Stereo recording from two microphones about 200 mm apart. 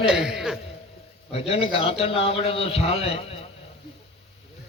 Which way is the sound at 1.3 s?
30° left (ahead or behind).